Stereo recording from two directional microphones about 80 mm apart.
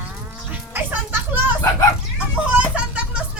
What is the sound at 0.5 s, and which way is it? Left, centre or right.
Children playing, right.